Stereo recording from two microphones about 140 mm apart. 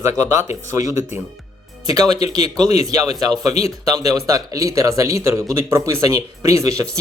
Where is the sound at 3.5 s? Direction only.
45° left (ahead or behind).